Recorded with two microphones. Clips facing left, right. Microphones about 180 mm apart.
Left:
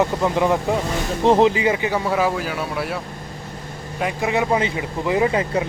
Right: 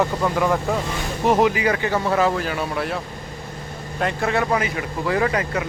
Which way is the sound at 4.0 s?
10° left (ahead or behind).